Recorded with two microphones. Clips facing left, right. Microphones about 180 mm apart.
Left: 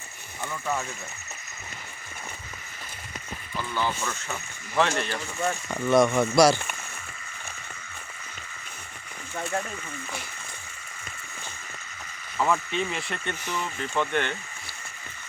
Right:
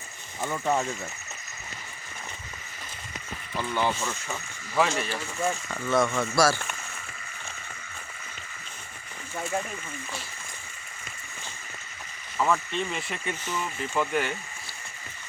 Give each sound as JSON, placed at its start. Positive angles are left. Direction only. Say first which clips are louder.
{"t": 0.5, "sound": "speech", "louder": "right 4 dB", "side_deg": -25}
{"t": 3.6, "sound": "speech", "louder": "right 2 dB", "side_deg": -20}
{"t": 5.6, "sound": "speech", "louder": "left 7 dB", "side_deg": 15}
{"t": 9.3, "sound": "speech", "louder": "even", "side_deg": -10}
{"t": 12.4, "sound": "speech", "louder": "left 1 dB", "side_deg": 0}